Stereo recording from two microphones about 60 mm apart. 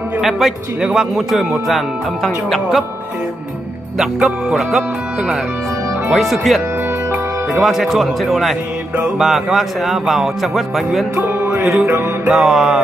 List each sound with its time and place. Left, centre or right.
0.2 s a man's voice: centre
4.0 s music: centre
6.1 s speech: centre
7.6 s speech: centre
11.2 s music: right
11.6 s speech: centre